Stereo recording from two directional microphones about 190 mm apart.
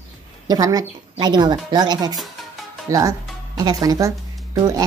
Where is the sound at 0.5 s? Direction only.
20° right (ahead or behind).